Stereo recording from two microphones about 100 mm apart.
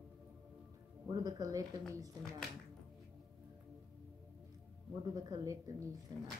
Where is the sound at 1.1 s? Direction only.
40° right (ahead or behind).